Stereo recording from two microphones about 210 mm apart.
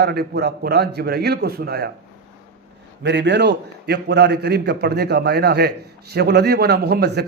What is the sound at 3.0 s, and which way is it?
Speech, 55° right (ahead or behind).